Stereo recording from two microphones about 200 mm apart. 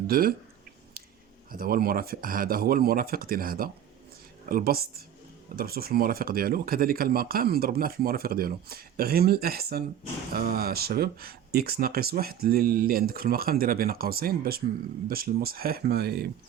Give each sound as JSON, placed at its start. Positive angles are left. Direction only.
{"t": 0.1, "sound": "speech", "side_deg": -45}
{"t": 1.5, "sound": "speech", "side_deg": -45}